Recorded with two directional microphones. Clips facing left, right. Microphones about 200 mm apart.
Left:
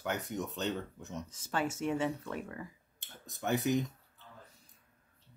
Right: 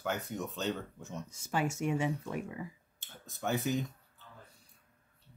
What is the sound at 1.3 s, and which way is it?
Speech, 10° right (ahead or behind).